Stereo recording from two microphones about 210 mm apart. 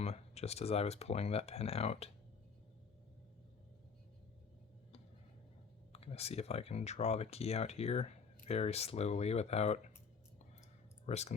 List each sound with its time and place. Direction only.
0.0 s speech: 30° left (ahead or behind)
5.9 s speech: 30° left (ahead or behind)
11.0 s speech: 30° left (ahead or behind)